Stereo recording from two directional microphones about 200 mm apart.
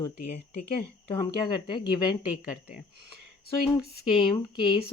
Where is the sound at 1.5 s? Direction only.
25° left (ahead or behind).